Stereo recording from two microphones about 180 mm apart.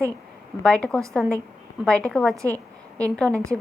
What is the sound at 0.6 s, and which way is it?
A woman's voice, 5° left (ahead or behind).